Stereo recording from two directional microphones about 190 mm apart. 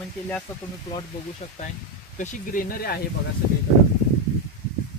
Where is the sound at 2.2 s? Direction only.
45° left (ahead or behind).